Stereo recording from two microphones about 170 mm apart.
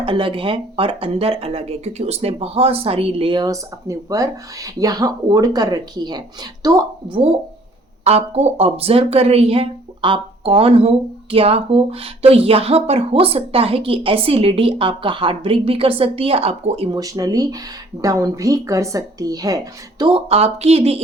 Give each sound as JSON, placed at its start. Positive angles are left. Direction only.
{"t": 0.0, "sound": "speech", "side_deg": -30}
{"t": 8.0, "sound": "speech", "side_deg": -40}
{"t": 17.0, "sound": "speech", "side_deg": -20}